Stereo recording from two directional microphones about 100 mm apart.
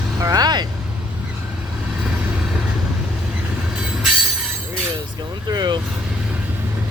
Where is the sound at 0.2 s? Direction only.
35° right (ahead or behind).